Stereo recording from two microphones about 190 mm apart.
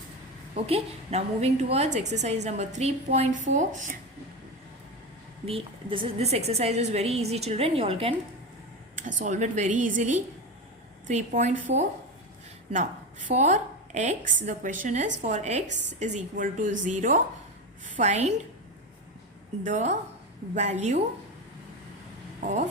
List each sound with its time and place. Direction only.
0.5 s a woman's voice: 35° right (ahead or behind)
5.5 s a woman's voice: 30° right (ahead or behind)
9.0 s a woman's voice: 40° right (ahead or behind)
12.7 s a woman's voice: 40° right (ahead or behind)
19.6 s a woman's voice: 40° right (ahead or behind)
22.4 s speech: 40° right (ahead or behind)